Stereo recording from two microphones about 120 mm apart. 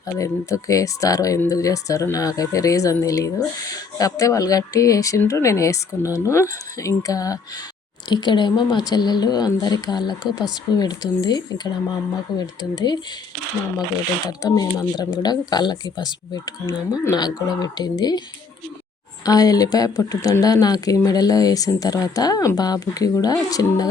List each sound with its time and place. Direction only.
0.2 s a woman's voice: 30° left (ahead or behind)
14.3 s speech: 30° left (ahead or behind)
19.2 s speech: 30° left (ahead or behind)